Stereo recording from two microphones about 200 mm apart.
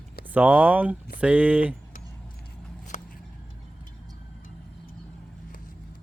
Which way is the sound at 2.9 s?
40° left (ahead or behind).